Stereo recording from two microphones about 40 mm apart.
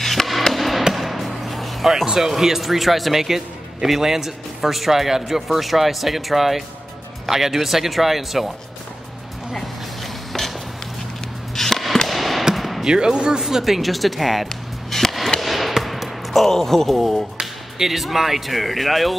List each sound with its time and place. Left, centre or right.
0.0 s music: centre
0.9 s speech: centre
11.5 s music: centre
12.5 s a sound: centre
12.8 s speech: centre
13.4 s speech: centre
15.0 s a sound: centre
15.4 s basketball bounce: centre
16.4 s speech: centre
17.4 s speech: centre